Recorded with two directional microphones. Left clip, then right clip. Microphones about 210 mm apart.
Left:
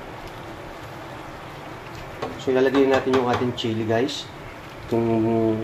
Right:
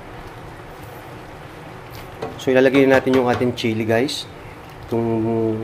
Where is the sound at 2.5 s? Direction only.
30° right (ahead or behind).